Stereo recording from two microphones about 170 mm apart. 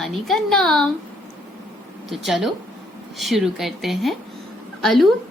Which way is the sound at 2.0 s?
Centre (ahead or behind).